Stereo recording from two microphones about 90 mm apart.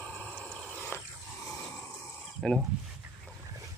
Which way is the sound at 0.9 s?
30° left (ahead or behind).